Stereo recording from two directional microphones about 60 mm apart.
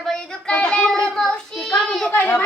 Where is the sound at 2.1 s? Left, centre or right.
Left.